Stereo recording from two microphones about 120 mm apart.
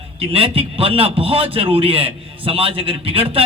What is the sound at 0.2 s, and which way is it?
A man's voice, 50° right (ahead or behind).